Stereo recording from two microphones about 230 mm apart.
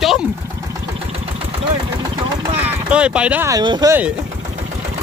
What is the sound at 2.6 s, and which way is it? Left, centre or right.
Speech, centre.